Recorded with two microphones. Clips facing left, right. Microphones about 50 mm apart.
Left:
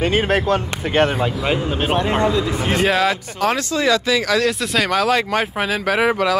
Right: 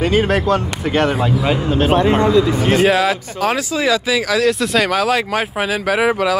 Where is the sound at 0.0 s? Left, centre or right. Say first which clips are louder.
Right 2 dB; left.